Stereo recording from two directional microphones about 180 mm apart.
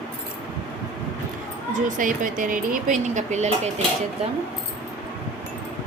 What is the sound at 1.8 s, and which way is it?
Speech, 45° right (ahead or behind).